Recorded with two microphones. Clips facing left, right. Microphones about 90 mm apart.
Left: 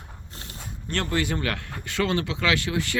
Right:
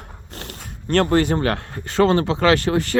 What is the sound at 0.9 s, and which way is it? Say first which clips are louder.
Speech: right 10 dB; 45° right (ahead or behind).